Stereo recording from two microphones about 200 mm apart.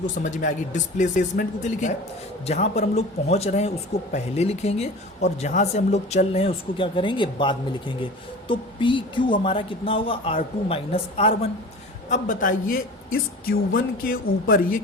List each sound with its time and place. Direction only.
0.2 s speech: 40° left (ahead or behind)
12.0 s speech: 40° left (ahead or behind)